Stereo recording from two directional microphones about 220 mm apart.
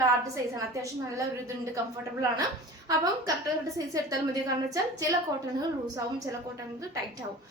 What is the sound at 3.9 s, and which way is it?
A woman's voice, 15° right (ahead or behind).